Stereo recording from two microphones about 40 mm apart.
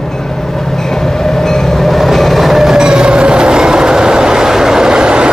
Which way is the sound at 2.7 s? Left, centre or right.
Centre.